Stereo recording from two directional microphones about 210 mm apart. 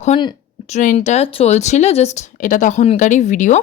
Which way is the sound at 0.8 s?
35° left (ahead or behind).